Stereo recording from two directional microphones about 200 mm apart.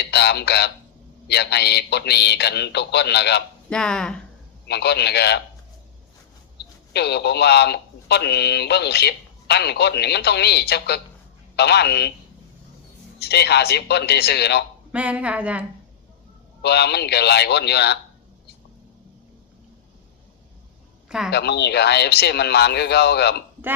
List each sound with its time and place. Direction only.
0.0 s speech: 55° left (ahead or behind)
3.7 s speech: 5° left (ahead or behind)
4.7 s speech: 55° left (ahead or behind)
6.9 s speech: 55° left (ahead or behind)
13.1 s speech: 55° left (ahead or behind)
14.9 s speech: 5° right (ahead or behind)
16.6 s speech: 55° left (ahead or behind)
21.2 s speech: 55° left (ahead or behind)